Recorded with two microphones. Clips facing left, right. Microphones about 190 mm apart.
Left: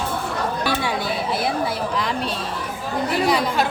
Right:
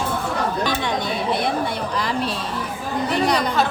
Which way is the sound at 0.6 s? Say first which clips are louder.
Even; 10° left (ahead or behind).